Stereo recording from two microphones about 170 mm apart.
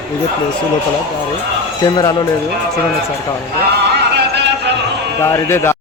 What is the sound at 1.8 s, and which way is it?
Speech, 25° left (ahead or behind).